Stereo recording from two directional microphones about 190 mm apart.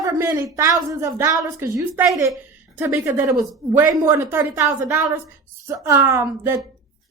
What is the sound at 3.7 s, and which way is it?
A woman's voice, 10° right (ahead or behind).